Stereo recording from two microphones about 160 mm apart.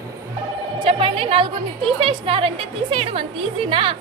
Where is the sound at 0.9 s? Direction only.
35° right (ahead or behind).